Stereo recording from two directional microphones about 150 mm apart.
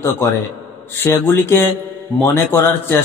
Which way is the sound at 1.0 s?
15° left (ahead or behind).